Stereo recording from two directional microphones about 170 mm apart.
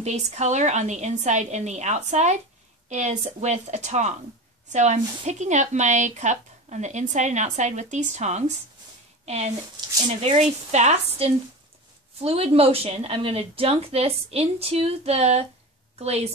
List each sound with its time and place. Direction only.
0.0 s a woman's voice: 40° right (ahead or behind)